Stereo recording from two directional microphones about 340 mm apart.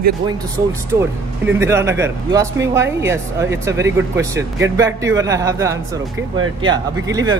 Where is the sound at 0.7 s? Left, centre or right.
Centre.